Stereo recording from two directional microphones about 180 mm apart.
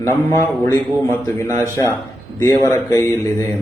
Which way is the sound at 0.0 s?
15° left (ahead or behind).